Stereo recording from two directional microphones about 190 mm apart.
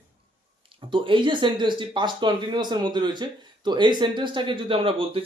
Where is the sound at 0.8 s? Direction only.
25° right (ahead or behind).